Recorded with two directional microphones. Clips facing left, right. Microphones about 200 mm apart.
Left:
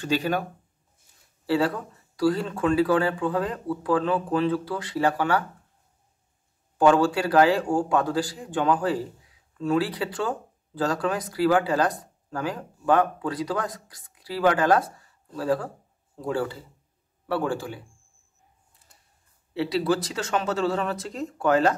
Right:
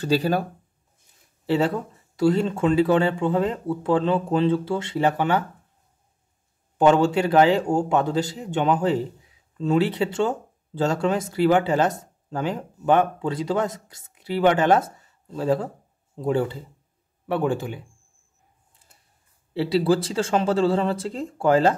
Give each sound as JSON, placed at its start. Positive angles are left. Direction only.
{"t": 0.0, "sound": "speech", "side_deg": -35}
{"t": 6.8, "sound": "speech", "side_deg": -20}
{"t": 19.5, "sound": "speech", "side_deg": -30}